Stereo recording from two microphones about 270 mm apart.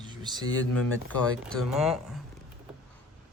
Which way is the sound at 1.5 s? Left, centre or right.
Centre.